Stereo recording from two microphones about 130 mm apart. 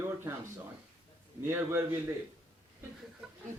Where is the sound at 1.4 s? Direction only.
15° right (ahead or behind).